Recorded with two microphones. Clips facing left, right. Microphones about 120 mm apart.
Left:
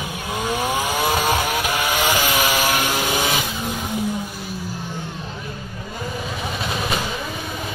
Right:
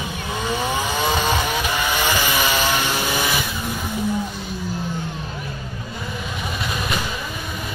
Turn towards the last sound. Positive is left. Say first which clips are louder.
# left 1 dB
turn(degrees=30)  # may be behind; listen again after turning